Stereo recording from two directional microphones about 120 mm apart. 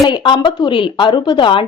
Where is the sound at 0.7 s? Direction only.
45° left (ahead or behind).